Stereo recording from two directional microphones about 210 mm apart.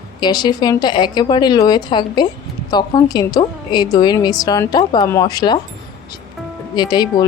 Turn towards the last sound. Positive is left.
turn(degrees=20)  # may be behind; listen again after turning